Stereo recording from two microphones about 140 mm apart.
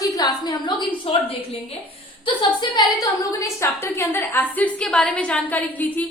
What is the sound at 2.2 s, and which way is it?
Speech, 35° left (ahead or behind).